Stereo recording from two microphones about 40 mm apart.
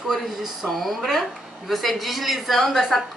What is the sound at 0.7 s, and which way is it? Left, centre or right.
A woman's voice, centre.